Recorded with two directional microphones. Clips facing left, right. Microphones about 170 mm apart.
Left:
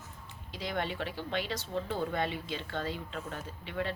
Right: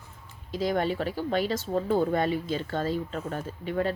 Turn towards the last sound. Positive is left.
turn(degrees=-40)  # may be behind; listen again after turning